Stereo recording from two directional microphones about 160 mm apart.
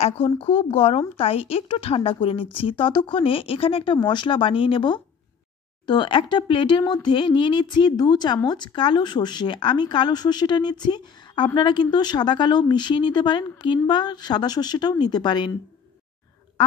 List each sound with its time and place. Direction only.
0.0 s speech: 35° left (ahead or behind)